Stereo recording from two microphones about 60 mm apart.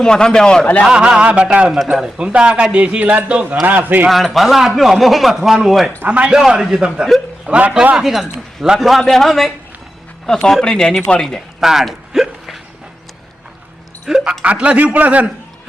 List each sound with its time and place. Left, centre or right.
0.0 s a man's voice: centre
0.9 s a man's voice: centre; by 4.1 s right
4.1 s a man's voice: centre
6.1 s speech: right
6.3 s a man's voice: centre
7.5 s speech: right
7.9 s a man's voice: centre
11.6 s a sound: centre
14.1 s a man's voice: centre
14.4 s speech: right